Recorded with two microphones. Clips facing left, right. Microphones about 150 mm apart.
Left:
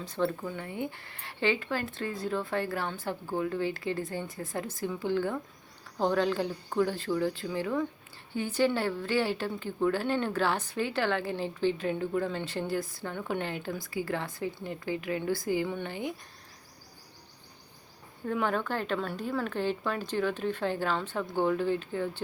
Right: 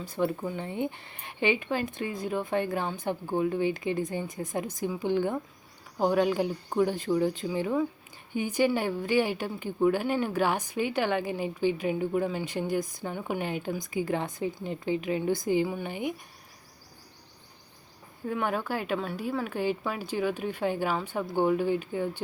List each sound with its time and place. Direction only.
0.0 s a woman's voice: 10° right (ahead or behind)
18.3 s a woman's voice: 5° right (ahead or behind)